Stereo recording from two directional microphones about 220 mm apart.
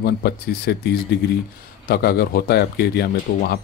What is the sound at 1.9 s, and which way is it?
Speech, 45° left (ahead or behind).